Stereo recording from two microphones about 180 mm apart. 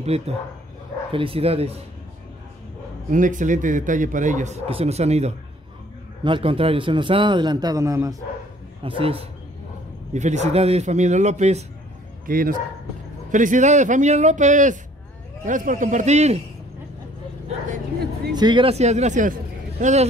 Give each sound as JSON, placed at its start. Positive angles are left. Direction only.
{"t": 0.1, "sound": "speech", "side_deg": -35}
{"t": 3.1, "sound": "a man's voice", "side_deg": -45}
{"t": 8.8, "sound": "speech", "side_deg": -30}
{"t": 12.3, "sound": "a man's voice", "side_deg": -50}
{"t": 18.3, "sound": "speech", "side_deg": -25}